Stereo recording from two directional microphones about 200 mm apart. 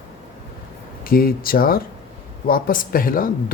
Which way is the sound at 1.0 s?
45° left (ahead or behind).